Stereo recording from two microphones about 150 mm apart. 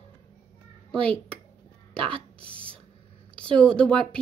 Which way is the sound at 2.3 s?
35° right (ahead or behind).